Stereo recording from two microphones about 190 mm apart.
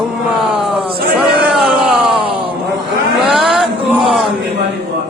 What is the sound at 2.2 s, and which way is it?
Groan, 25° right (ahead or behind).